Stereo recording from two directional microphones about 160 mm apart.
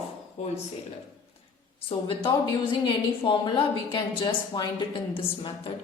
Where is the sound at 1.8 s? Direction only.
35° left (ahead or behind).